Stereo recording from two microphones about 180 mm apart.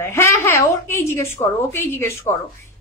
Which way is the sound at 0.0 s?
15° left (ahead or behind).